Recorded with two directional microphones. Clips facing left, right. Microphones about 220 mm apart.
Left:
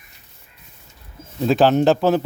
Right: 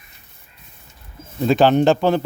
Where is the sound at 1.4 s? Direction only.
Centre (ahead or behind).